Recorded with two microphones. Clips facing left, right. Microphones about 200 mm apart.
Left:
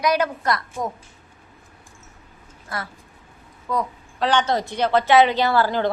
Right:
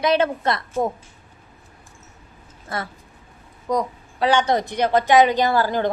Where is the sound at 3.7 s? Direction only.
15° right (ahead or behind).